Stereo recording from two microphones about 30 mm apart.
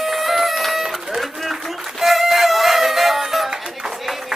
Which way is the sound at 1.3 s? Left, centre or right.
Centre.